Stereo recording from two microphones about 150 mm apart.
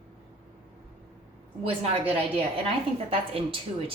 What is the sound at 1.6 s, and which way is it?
A woman's voice, 40° right (ahead or behind).